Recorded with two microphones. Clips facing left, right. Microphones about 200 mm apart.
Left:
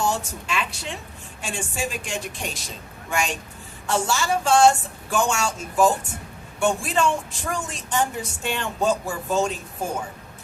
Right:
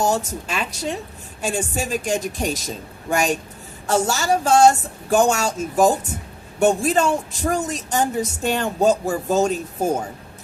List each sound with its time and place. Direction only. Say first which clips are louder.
0.0 s speech: right 4 dB; 40° right (ahead or behind)